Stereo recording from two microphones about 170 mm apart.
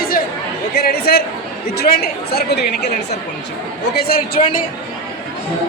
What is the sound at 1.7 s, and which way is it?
A woman's voice, 70° left (ahead or behind).